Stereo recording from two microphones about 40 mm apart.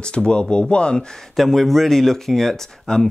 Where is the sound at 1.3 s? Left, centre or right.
Centre.